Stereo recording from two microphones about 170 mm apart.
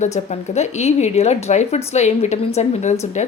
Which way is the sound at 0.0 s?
40° left (ahead or behind).